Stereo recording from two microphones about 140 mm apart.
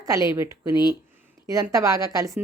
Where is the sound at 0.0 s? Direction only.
25° right (ahead or behind).